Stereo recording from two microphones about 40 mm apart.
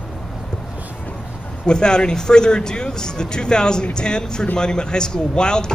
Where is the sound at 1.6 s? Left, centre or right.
Left.